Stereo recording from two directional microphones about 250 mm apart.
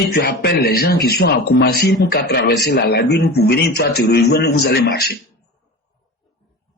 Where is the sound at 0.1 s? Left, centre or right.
Left.